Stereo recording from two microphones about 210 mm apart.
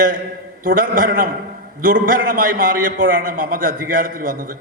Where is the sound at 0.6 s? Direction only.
40° right (ahead or behind).